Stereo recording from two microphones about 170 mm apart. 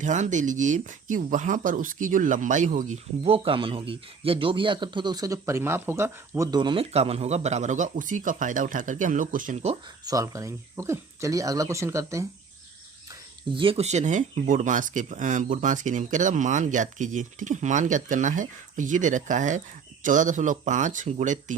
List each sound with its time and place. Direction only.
0.0 s speech: 45° right (ahead or behind)
10.0 s speech: 20° right (ahead or behind)
13.1 s speech: 30° right (ahead or behind); by 21.5 s 45° right (ahead or behind)